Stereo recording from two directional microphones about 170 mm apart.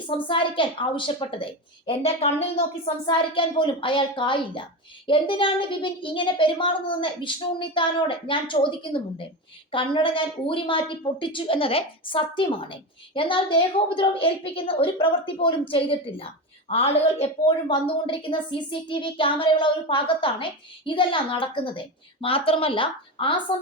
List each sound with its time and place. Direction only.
0.3 s a woman's voice: 30° left (ahead or behind)